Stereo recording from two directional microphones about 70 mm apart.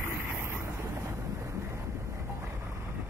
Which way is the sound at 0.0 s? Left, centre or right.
Right.